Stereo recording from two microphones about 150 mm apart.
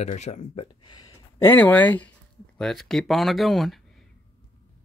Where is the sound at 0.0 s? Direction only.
50° left (ahead or behind).